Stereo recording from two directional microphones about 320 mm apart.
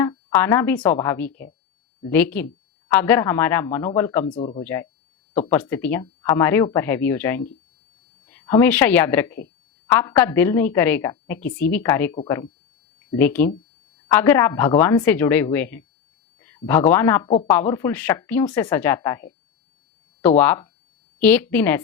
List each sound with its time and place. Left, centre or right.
0.0 s a woman's voice: centre
4.4 s a woman's voice: centre